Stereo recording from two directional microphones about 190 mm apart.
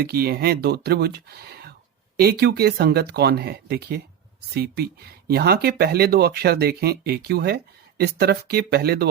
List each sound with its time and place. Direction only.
0.0 s speech: 55° right (ahead or behind)